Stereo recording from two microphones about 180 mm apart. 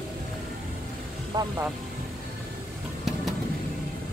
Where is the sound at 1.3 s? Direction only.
20° right (ahead or behind).